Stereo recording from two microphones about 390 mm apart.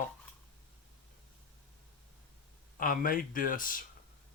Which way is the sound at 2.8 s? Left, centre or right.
Left.